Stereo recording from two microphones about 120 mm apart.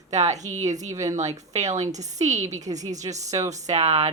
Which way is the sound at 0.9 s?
25° right (ahead or behind).